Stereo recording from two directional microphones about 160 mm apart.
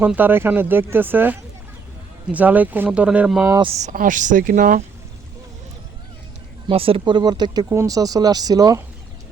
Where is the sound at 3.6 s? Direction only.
45° right (ahead or behind).